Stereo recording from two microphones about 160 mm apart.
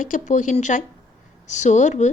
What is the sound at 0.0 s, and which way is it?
A woman's voice, 50° left (ahead or behind).